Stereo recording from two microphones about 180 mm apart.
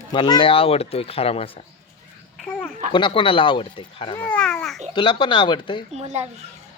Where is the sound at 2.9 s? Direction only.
30° left (ahead or behind).